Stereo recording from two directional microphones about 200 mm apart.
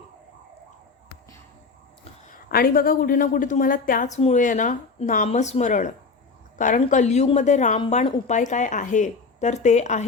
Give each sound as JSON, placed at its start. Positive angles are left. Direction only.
{"t": 2.3, "sound": "a woman's voice", "side_deg": 45}